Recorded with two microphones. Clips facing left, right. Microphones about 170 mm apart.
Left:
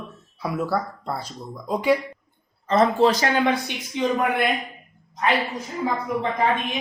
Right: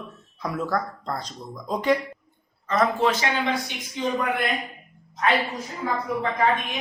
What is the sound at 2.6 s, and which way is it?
Speech, 30° left (ahead or behind).